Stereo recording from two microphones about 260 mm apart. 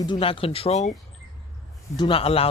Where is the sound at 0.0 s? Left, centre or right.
Centre.